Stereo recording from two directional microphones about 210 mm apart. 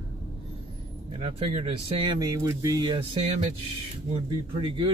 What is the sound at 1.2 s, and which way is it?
Speech, 30° right (ahead or behind).